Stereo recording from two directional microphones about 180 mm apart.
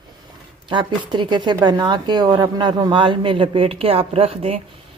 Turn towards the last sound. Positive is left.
turn(degrees=-35)  # may be behind; listen again after turning